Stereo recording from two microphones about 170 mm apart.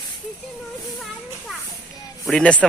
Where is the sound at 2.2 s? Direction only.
5° left (ahead or behind).